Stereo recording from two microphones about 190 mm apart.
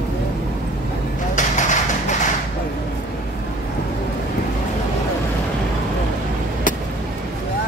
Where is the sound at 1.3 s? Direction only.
40° left (ahead or behind).